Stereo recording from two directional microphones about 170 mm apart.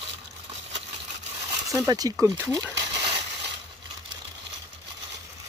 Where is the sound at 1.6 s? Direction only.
20° right (ahead or behind).